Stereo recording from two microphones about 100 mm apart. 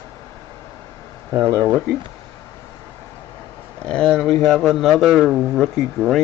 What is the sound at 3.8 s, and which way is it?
Speech, 10° left (ahead or behind).